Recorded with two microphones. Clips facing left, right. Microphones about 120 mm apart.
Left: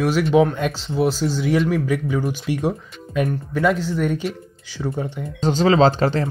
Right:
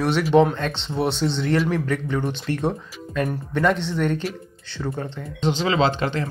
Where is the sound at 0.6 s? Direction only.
10° left (ahead or behind).